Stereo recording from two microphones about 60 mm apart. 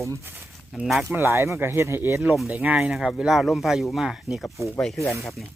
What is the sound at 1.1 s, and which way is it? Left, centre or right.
Speech, right.